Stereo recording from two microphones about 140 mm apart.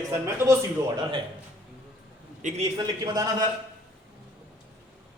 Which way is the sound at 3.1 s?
25° right (ahead or behind).